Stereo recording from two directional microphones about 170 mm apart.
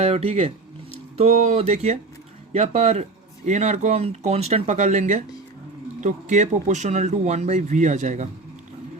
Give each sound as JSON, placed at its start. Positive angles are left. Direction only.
{"t": 0.0, "sound": "speech", "side_deg": -35}